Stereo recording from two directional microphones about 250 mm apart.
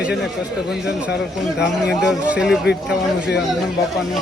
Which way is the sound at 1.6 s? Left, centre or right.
Centre.